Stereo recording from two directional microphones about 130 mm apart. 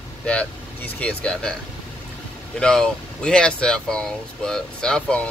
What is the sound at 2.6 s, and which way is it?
Speech, 5° left (ahead or behind).